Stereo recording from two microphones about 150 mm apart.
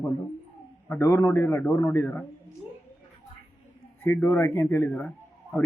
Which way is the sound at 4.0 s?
15° left (ahead or behind).